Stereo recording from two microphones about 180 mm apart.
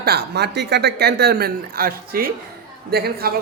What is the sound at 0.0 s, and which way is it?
Speech, 60° right (ahead or behind).